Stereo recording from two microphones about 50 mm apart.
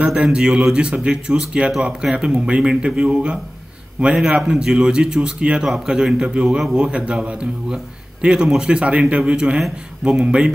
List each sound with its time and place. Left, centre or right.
0.2 s a man's voice: centre